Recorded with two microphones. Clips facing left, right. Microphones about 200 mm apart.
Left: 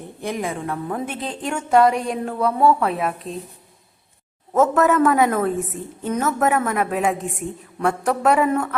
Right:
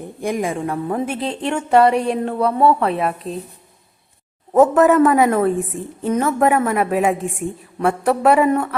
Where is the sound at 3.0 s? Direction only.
Centre (ahead or behind).